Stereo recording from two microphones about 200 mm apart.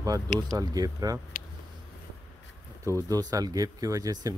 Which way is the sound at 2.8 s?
15° right (ahead or behind).